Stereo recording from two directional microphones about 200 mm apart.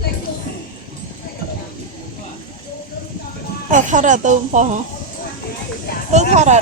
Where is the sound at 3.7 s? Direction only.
40° right (ahead or behind).